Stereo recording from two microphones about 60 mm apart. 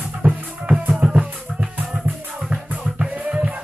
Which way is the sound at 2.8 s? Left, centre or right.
Centre.